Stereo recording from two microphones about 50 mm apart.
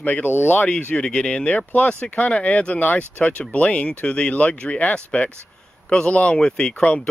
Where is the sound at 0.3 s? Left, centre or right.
Left.